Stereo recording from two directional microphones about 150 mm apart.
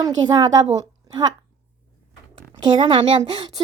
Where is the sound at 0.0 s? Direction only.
25° right (ahead or behind).